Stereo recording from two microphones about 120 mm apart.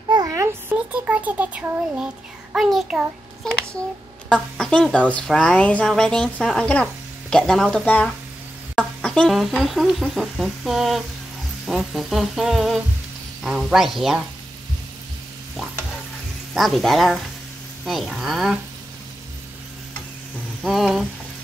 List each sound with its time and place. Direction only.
0.3 s a sound: 25° right (ahead or behind)
0.9 s a child's voice: 10° right (ahead or behind)
3.4 s speech: 5° left (ahead or behind)
16.5 s speech: centre (ahead or behind)
20.6 s speech: 5° right (ahead or behind)